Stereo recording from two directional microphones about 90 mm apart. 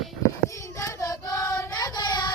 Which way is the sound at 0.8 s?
40° left (ahead or behind).